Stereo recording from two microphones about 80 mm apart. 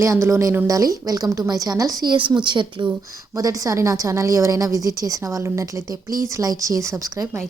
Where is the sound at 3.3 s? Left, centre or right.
Right.